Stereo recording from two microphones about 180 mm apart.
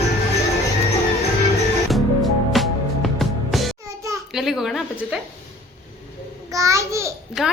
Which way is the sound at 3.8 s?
15° right (ahead or behind).